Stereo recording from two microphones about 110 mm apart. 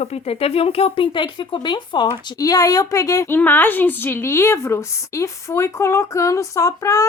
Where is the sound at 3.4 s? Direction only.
15° left (ahead or behind).